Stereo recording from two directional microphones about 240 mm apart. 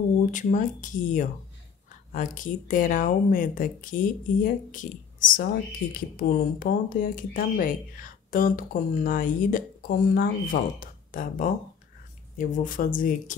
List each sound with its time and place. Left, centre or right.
0.3 s speech: left